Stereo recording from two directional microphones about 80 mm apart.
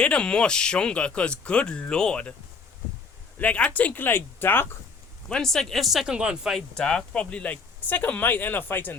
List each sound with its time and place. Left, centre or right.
0.0 s speech: centre
3.3 s speech: centre
5.3 s speech: centre
6.1 s speech: centre
6.5 s speech: centre; by 9.0 s left